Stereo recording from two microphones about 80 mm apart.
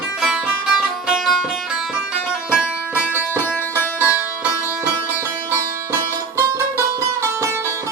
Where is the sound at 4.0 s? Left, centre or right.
Right.